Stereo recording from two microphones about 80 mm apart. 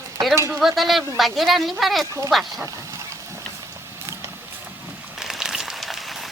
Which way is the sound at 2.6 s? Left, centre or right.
Right.